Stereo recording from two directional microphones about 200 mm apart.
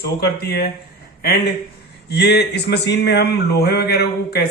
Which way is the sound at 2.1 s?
55° left (ahead or behind).